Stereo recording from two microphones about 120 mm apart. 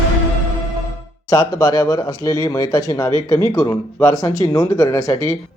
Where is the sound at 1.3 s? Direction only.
30° left (ahead or behind).